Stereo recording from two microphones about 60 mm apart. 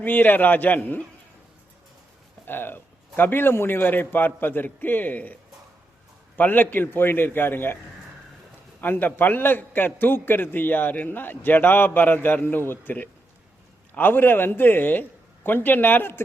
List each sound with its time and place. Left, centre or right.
0.0 s a man's voice: left
2.5 s a man's voice: left
8.8 s a man's voice: left